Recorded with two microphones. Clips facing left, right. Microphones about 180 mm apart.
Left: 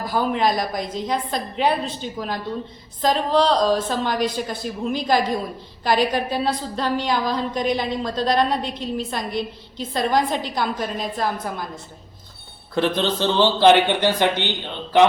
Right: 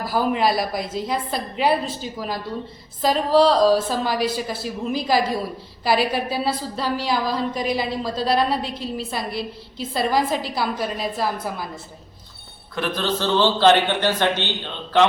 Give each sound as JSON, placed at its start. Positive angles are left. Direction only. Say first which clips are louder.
{"t": 0.0, "sound": "a woman's voice", "louder": "even", "side_deg": -5}
{"t": 12.7, "sound": "speech", "louder": "left 5 dB", "side_deg": 30}
{"t": 13.1, "sound": "speech", "louder": "right 3 dB", "side_deg": 15}